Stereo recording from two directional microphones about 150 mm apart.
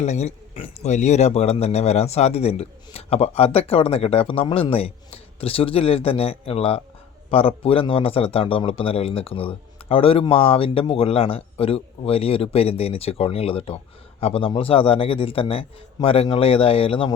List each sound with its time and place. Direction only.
0.0 s a man's voice: 50° left (ahead or behind)